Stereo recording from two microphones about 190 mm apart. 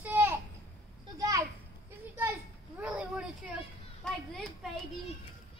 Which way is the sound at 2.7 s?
5° right (ahead or behind).